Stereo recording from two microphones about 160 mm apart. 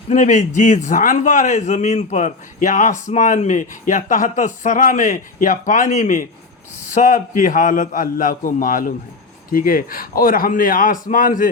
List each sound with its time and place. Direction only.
0.1 s a man's voice: 50° left (ahead or behind)